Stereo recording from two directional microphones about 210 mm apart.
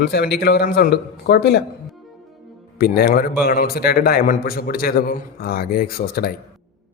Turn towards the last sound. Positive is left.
turn(degrees=45)  # may be behind; listen again after turning